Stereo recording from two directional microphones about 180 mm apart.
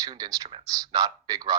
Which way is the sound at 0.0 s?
20° right (ahead or behind).